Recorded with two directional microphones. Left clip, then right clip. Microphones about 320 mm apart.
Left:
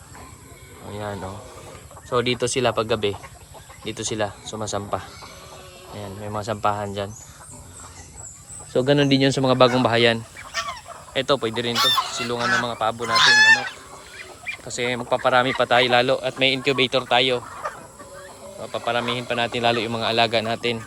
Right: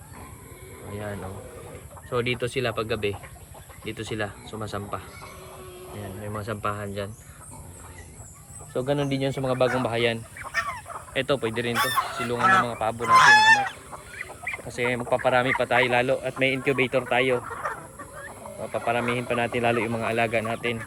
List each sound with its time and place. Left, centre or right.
2.0 s a man's voice: centre
8.7 s a man's voice: left; by 13.1 s centre
13.1 s goose: centre
14.8 s a man's voice: centre
18.7 s a man's voice: centre